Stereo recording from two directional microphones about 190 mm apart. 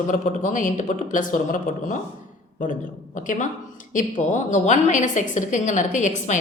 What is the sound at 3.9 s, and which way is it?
A woman's voice, 40° left (ahead or behind).